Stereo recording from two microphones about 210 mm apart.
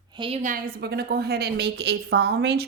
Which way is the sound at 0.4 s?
40° right (ahead or behind).